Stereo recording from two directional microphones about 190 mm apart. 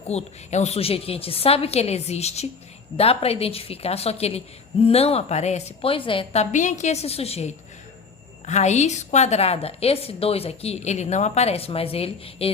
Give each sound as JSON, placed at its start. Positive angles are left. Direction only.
{"t": 0.1, "sound": "a woman's voice", "side_deg": 35}